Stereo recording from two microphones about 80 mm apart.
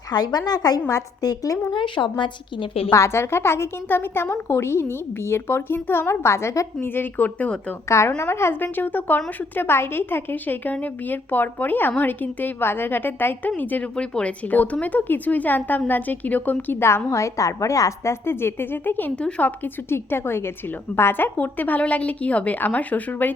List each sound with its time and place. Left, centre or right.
0.1 s a woman's voice: left
1.7 s a woman's voice: left
2.9 s a woman's voice: left
6.8 s a woman's voice: left
7.9 s a woman's voice: left; by 23.3 s centre